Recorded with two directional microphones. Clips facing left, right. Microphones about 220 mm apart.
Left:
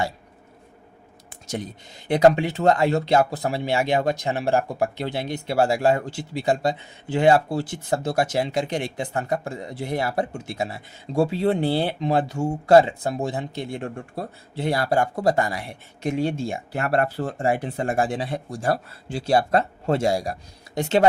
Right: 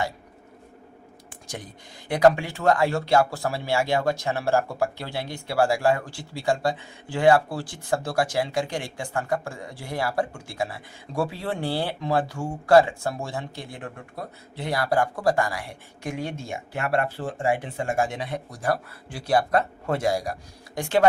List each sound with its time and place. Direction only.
1.3 s speech: 25° left (ahead or behind)